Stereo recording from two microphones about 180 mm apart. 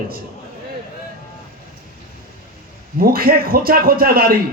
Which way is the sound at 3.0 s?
55° right (ahead or behind).